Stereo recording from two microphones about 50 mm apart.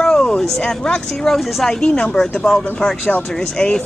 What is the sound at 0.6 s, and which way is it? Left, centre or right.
Speech, centre.